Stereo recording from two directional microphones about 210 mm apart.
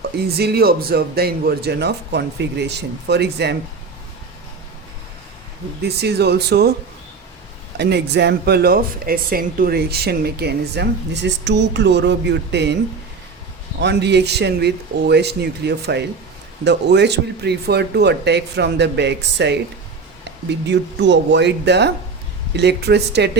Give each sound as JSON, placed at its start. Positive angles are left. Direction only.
{"t": 0.3, "sound": "speech", "side_deg": -50}
{"t": 5.8, "sound": "speech", "side_deg": -50}
{"t": 7.8, "sound": "speech", "side_deg": -50}
{"t": 13.8, "sound": "speech", "side_deg": -55}